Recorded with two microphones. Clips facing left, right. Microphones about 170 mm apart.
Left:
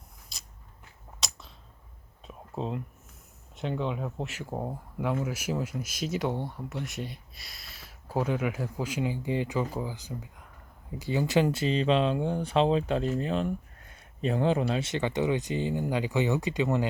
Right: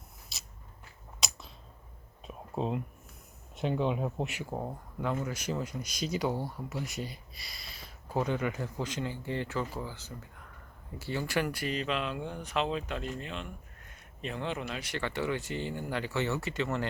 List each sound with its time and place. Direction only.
0.3 s scissors: 5° right (ahead or behind)
2.2 s a sound: 10° right (ahead or behind)
3.6 s speech: 15° right (ahead or behind)
4.4 s speech: 5° left (ahead or behind)